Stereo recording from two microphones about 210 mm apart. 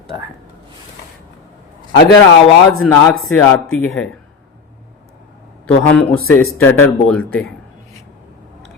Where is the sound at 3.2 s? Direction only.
5° left (ahead or behind).